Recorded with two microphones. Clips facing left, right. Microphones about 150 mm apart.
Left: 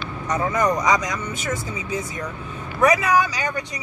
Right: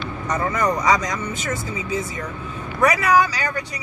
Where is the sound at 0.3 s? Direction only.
10° left (ahead or behind).